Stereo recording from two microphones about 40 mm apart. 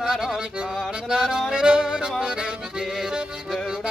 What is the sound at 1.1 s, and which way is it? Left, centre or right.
Music, centre.